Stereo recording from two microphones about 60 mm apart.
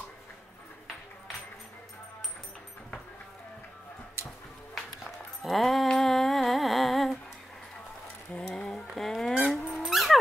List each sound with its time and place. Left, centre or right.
5.0 s music: centre
8.4 s a sound: centre
9.5 s dog: centre